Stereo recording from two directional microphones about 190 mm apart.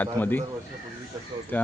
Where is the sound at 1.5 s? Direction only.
10° left (ahead or behind).